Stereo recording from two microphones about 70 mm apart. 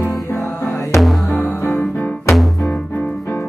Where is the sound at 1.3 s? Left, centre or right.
Left.